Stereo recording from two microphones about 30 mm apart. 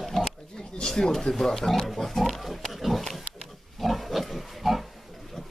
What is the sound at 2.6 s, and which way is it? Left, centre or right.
Pig, centre.